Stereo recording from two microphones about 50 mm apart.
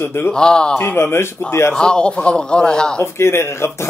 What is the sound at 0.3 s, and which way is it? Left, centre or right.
Speech, centre.